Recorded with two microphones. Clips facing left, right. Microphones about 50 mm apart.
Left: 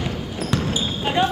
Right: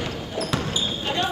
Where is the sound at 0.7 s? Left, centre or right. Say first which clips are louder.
Left 3 dB; centre.